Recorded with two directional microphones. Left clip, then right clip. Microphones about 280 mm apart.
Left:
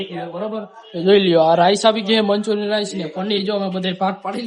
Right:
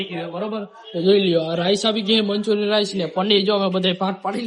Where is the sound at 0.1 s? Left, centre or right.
Centre.